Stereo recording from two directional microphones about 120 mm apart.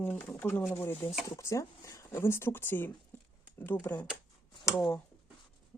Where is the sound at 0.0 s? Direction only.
15° left (ahead or behind).